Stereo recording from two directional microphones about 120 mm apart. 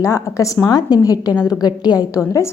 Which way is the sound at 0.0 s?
25° left (ahead or behind).